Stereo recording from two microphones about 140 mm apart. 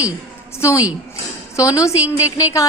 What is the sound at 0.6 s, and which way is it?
A woman's voice, 20° left (ahead or behind).